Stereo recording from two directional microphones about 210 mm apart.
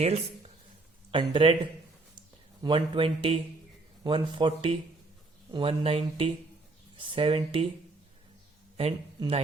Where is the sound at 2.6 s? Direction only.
25° right (ahead or behind).